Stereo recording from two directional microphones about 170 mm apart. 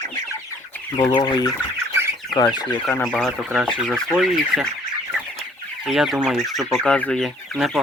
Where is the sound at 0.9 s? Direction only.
25° left (ahead or behind).